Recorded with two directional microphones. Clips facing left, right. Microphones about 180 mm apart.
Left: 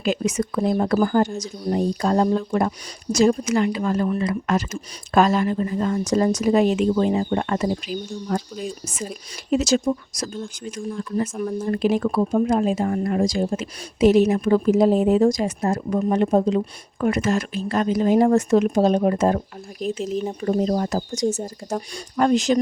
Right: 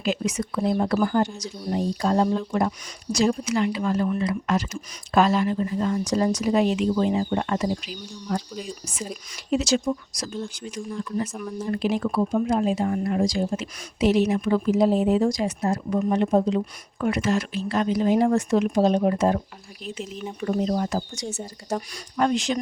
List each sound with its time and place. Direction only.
0.0 s speech: 50° left (ahead or behind)
11.4 s speech: 40° left (ahead or behind)